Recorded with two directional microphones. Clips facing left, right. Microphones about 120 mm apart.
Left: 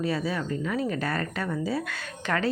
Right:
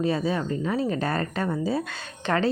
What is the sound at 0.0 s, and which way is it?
Speech, 25° right (ahead or behind).